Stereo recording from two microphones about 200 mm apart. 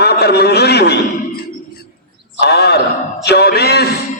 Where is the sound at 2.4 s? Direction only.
55° left (ahead or behind).